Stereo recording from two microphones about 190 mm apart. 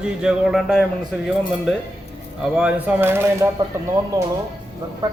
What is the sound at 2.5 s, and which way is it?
Speech, 5° right (ahead or behind).